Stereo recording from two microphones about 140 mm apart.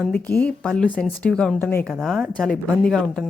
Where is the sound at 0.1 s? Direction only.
10° left (ahead or behind).